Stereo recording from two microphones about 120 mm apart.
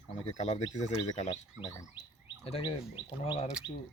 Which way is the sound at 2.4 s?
50° left (ahead or behind).